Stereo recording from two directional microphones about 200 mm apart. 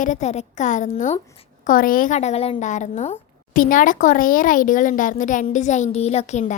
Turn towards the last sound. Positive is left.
turn(degrees=35)  # may be behind; listen again after turning